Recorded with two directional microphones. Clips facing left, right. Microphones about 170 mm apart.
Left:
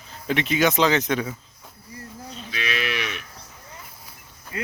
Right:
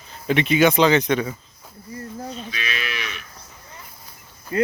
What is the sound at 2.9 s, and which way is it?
Livestock, 60° left (ahead or behind).